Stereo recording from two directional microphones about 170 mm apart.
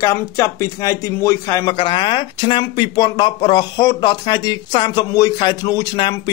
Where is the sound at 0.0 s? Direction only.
20° left (ahead or behind).